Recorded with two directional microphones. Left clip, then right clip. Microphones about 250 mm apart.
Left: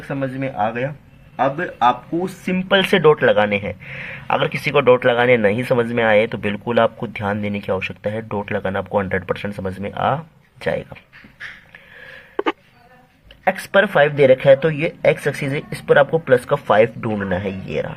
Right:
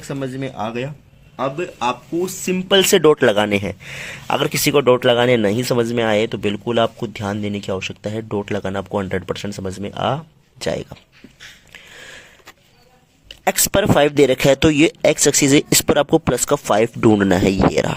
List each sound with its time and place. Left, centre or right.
0.1 s speech: right
1.4 s speech: right
11.7 s snort: right
13.2 s speech: right